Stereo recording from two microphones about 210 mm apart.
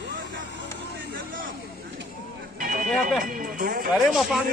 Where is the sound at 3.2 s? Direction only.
40° right (ahead or behind).